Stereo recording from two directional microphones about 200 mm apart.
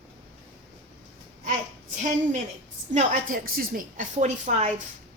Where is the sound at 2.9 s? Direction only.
40° right (ahead or behind).